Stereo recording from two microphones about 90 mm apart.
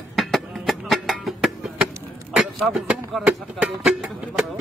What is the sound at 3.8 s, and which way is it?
Music, 5° right (ahead or behind).